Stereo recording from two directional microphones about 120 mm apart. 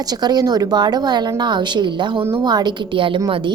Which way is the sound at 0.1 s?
35° right (ahead or behind).